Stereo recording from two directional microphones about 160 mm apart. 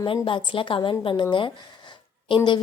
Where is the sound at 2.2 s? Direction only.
30° left (ahead or behind).